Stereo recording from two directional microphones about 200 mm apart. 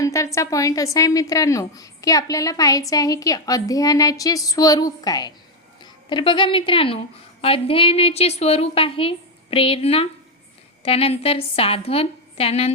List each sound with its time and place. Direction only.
0.0 s a woman's voice: 15° left (ahead or behind); by 12.7 s 30° left (ahead or behind)